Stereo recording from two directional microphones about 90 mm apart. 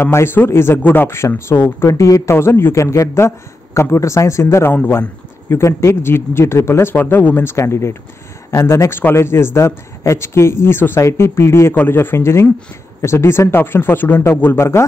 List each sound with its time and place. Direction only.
0.0 s speech: 30° left (ahead or behind)
1.9 s a man's voice: 40° left (ahead or behind)
2.3 s a man's voice: 25° left (ahead or behind)